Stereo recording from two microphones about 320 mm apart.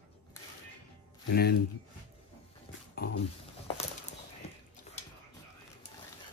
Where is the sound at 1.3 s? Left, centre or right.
Left.